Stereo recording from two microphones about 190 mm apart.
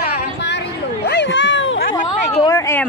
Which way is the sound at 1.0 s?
65° left (ahead or behind).